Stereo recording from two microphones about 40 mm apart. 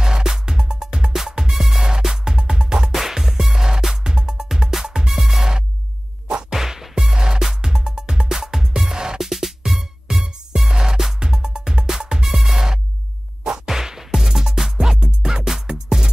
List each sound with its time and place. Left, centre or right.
0.0 s music: centre
9.2 s music: centre